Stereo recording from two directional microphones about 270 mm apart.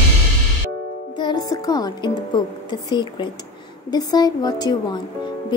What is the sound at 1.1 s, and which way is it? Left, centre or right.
Music, centre.